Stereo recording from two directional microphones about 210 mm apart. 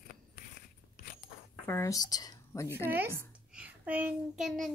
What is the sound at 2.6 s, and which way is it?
Speech, 10° right (ahead or behind).